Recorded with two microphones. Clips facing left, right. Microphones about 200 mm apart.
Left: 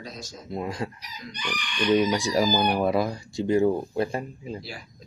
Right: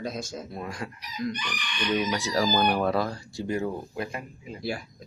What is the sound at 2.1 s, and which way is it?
Speech, 15° left (ahead or behind).